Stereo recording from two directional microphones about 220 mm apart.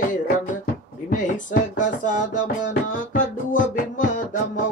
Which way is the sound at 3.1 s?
35° left (ahead or behind).